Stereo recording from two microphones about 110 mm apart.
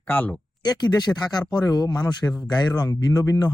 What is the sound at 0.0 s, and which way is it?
Speech, 15° left (ahead or behind).